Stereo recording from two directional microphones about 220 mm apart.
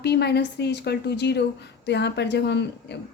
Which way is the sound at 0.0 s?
50° left (ahead or behind).